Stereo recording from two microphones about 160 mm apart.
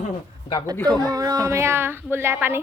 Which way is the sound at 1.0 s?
20° right (ahead or behind).